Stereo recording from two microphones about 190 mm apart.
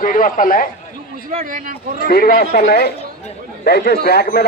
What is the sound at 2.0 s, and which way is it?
Speech, 55° left (ahead or behind).